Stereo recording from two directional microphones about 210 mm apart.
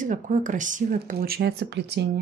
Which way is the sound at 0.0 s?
35° right (ahead or behind).